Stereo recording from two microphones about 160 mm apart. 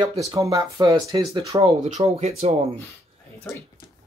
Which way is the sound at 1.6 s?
40° right (ahead or behind).